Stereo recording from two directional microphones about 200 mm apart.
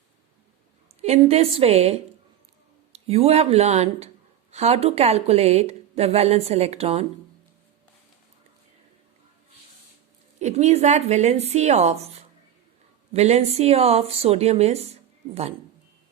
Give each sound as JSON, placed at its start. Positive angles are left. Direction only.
{"t": 1.0, "sound": "a woman's voice", "side_deg": -30}
{"t": 10.4, "sound": "a woman's voice", "side_deg": -35}